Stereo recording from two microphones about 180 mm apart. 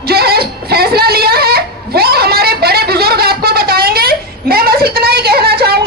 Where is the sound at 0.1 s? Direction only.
60° right (ahead or behind).